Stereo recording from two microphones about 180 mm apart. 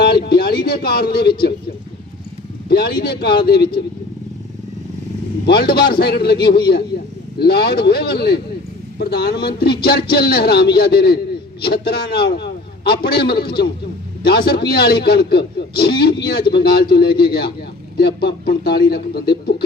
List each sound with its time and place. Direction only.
0.0 s speech: 65° left (ahead or behind)
2.6 s speech: 60° left (ahead or behind)
5.5 s speech: 65° left (ahead or behind)
6.9 s a sound: 65° left (ahead or behind)
7.3 s a man's voice: 60° left (ahead or behind)